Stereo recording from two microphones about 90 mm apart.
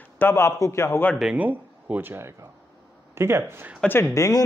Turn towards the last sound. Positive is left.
turn(degrees=40)  # may be behind; listen again after turning